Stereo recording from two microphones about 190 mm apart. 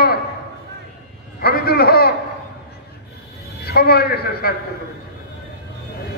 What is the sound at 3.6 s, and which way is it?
Speech, 55° left (ahead or behind).